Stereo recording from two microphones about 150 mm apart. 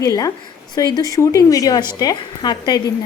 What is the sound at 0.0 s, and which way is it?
Speech, 25° left (ahead or behind).